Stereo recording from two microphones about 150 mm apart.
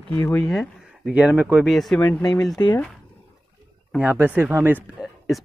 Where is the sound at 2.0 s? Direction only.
25° left (ahead or behind).